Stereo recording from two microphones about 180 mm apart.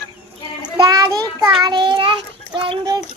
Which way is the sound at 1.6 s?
25° right (ahead or behind).